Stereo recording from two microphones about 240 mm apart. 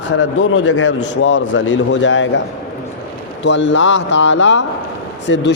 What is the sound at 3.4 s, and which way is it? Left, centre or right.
A man's voice, left.